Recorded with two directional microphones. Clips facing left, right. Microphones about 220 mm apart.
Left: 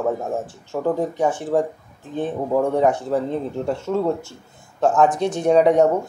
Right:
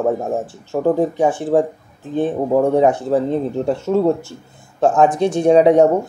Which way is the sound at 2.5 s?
25° right (ahead or behind).